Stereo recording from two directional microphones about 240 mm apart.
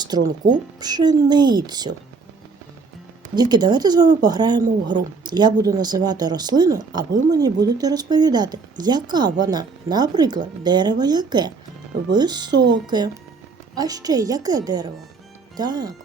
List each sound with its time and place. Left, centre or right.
0.0 s speech: centre
3.3 s speech: centre